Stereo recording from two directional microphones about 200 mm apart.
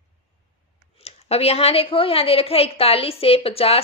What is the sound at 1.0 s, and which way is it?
A woman's voice, 30° left (ahead or behind).